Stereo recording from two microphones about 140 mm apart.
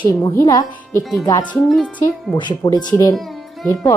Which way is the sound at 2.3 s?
30° left (ahead or behind).